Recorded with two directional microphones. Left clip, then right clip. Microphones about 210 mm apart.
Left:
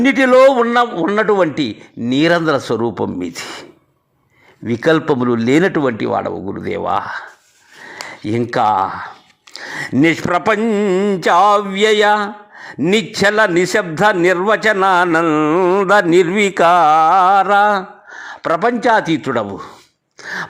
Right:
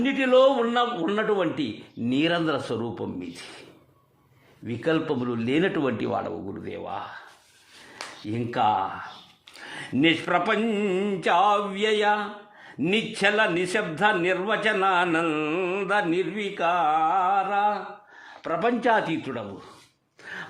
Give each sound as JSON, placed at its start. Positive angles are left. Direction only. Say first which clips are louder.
{"t": 0.0, "sound": "a man's voice", "louder": "left 10 dB", "side_deg": 35}
{"t": 4.6, "sound": "a man's voice", "louder": "left 12 dB", "side_deg": 30}
{"t": 6.6, "sound": "a man's voice", "louder": "left 15 dB", "side_deg": 35}
{"t": 8.3, "sound": "a man's voice", "louder": "left 9 dB", "side_deg": 30}
{"t": 15.9, "sound": "a man's voice", "louder": "left 12 dB", "side_deg": 35}
{"t": 19.2, "sound": "a man's voice", "louder": "left 15 dB", "side_deg": 35}
{"t": 20.2, "sound": "a sound", "louder": "left 13 dB", "side_deg": 30}